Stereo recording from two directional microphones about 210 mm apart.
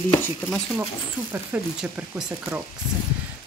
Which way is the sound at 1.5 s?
5° right (ahead or behind).